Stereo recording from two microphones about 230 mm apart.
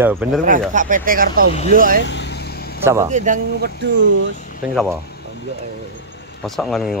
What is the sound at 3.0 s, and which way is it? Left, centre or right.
Speech, right.